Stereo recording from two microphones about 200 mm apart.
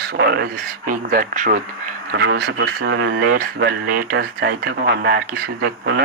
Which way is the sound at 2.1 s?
55° right (ahead or behind).